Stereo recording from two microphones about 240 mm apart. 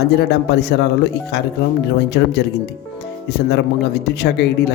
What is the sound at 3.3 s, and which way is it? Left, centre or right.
A man's voice, left.